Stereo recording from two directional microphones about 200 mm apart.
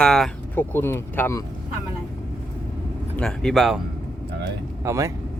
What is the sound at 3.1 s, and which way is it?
Speech, 5° left (ahead or behind).